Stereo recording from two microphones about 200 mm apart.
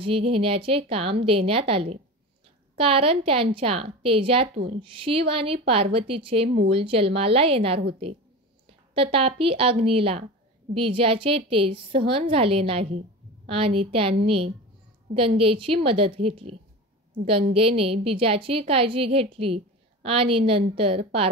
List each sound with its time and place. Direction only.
0.0 s a woman's voice: 30° right (ahead or behind)